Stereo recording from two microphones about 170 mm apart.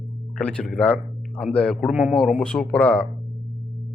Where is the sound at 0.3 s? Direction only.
5° left (ahead or behind).